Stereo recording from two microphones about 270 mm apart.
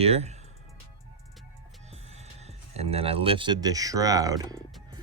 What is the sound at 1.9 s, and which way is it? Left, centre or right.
Speech, right.